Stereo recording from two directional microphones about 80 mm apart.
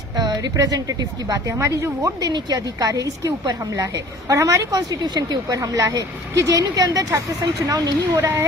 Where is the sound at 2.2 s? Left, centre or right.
Right.